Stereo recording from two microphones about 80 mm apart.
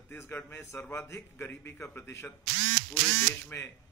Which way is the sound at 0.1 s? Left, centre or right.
Left.